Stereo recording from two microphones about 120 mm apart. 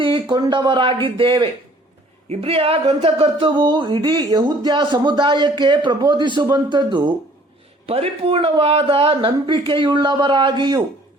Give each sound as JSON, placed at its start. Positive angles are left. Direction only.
{"t": 0.0, "sound": "speech", "side_deg": -40}
{"t": 7.9, "sound": "speech", "side_deg": -55}